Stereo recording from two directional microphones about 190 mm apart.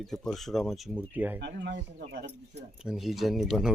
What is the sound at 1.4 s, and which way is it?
A man's voice, 65° right (ahead or behind).